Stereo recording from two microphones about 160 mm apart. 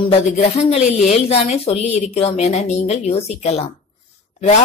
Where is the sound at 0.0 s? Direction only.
40° left (ahead or behind).